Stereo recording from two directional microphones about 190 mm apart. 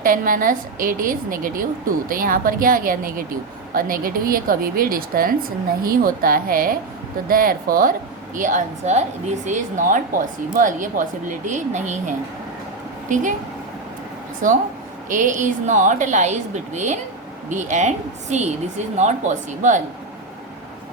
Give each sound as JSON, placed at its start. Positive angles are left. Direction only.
{"t": 0.0, "sound": "a woman's voice", "side_deg": -45}
{"t": 15.1, "sound": "a woman's voice", "side_deg": -40}